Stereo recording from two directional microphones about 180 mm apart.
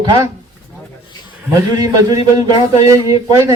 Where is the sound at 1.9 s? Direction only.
20° right (ahead or behind).